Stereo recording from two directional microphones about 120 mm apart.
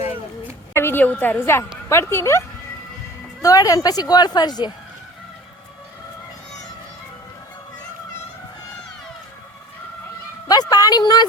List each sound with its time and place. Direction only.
0.7 s a woman's voice: 20° left (ahead or behind)
3.4 s speech: 30° left (ahead or behind)
10.5 s a sound: 35° left (ahead or behind)